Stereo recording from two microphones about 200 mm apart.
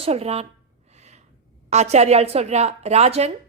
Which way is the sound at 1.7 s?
35° right (ahead or behind).